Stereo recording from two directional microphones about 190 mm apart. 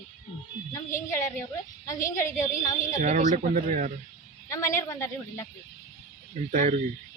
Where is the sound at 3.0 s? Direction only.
40° right (ahead or behind).